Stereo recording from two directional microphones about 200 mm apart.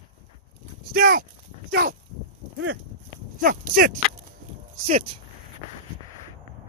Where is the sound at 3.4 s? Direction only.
45° right (ahead or behind).